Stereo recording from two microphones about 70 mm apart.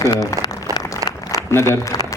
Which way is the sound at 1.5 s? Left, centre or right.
Left.